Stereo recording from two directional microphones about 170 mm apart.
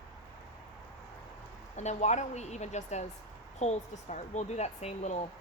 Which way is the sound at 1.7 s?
40° left (ahead or behind).